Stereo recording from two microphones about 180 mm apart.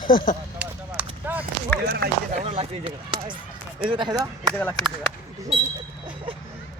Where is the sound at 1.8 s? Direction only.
55° right (ahead or behind).